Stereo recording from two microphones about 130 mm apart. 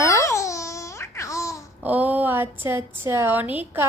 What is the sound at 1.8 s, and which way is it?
A woman's voice, 15° right (ahead or behind).